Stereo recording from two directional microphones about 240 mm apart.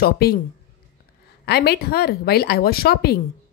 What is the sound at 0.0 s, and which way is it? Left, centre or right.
Speech, left.